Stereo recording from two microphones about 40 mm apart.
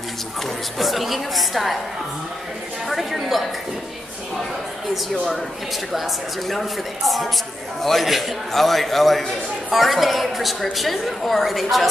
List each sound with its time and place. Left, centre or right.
0.7 s a woman's voice: centre
2.9 s a woman's voice: centre
5.1 s speech: centre
5.9 s a woman's voice: centre